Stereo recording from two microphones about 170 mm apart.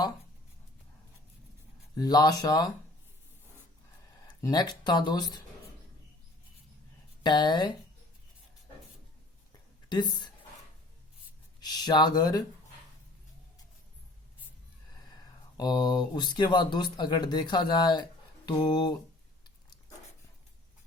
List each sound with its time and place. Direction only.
2.0 s speech: 25° left (ahead or behind)
4.4 s speech: 20° left (ahead or behind)
7.2 s speech: 25° left (ahead or behind)
9.9 s speech: 25° left (ahead or behind)
11.6 s speech: 25° left (ahead or behind)
15.0 s speech: 25° left (ahead or behind)